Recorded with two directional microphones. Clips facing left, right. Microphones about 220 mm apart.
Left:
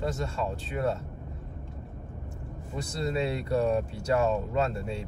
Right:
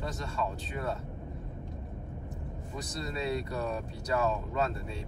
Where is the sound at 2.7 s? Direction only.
30° left (ahead or behind).